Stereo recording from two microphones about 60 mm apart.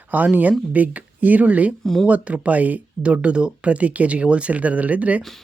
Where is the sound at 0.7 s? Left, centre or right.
Right.